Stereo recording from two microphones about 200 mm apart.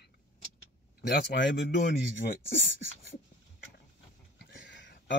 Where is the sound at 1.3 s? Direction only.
60° left (ahead or behind).